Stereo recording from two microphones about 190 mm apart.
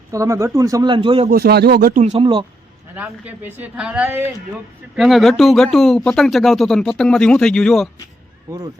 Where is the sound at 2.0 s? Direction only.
35° right (ahead or behind).